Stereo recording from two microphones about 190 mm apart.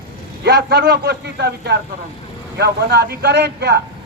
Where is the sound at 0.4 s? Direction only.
60° right (ahead or behind).